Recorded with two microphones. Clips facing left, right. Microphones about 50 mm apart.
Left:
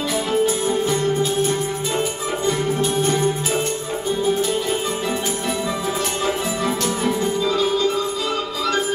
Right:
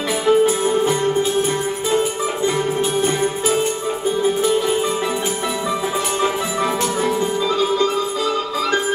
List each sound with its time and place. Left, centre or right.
0.3 s music: right
7.4 s music: right